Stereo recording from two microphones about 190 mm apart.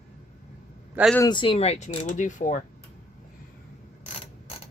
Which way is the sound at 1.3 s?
25° left (ahead or behind).